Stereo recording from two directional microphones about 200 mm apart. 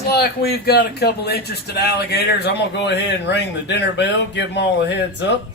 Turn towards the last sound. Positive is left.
turn(degrees=60)  # may be behind; listen again after turning